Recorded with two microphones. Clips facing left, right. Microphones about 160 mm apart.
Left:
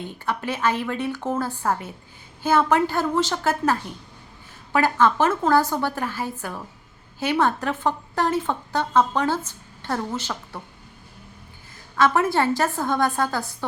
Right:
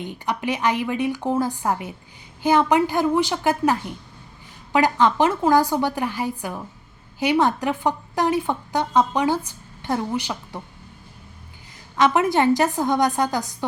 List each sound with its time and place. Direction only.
0.0 s a woman's voice: 15° right (ahead or behind)
11.9 s a woman's voice: 20° right (ahead or behind)